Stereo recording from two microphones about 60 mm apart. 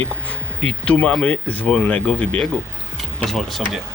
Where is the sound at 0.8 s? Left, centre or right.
Centre.